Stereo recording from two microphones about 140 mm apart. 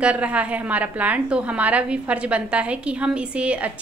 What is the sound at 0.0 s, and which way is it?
A woman's voice, 10° right (ahead or behind).